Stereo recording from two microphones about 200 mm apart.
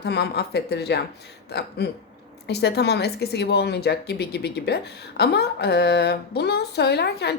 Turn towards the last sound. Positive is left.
turn(degrees=55)  # may be behind; listen again after turning